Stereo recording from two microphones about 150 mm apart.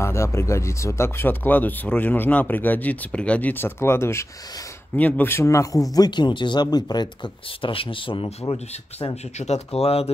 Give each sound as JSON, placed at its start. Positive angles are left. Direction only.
{"t": 0.0, "sound": "speech", "side_deg": 20}